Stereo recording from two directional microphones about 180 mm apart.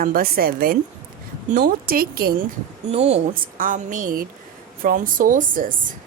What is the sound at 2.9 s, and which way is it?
Speech, 35° right (ahead or behind).